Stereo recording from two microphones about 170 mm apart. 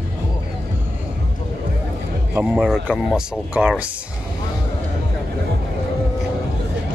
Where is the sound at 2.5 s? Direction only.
5° right (ahead or behind).